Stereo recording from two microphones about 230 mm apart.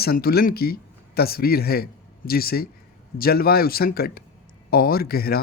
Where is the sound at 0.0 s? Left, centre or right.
Left.